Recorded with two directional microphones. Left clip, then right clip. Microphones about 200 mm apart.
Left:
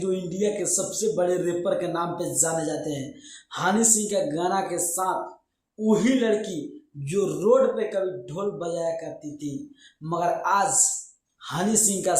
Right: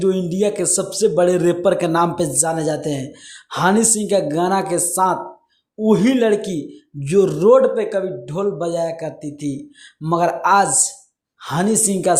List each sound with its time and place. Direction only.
0.0 s speech: 45° right (ahead or behind)